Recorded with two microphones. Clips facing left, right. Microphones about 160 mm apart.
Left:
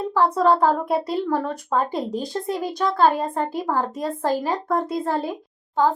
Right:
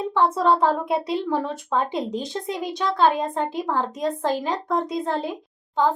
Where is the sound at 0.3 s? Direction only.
Centre (ahead or behind).